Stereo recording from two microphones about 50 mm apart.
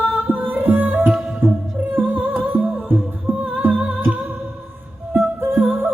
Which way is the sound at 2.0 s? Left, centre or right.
Right.